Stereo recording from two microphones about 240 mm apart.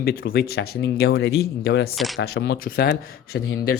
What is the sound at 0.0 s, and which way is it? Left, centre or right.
Speech, left.